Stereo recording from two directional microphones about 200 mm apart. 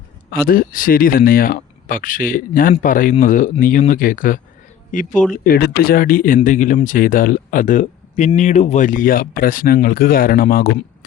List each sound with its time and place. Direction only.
0.3 s speech: 50° left (ahead or behind)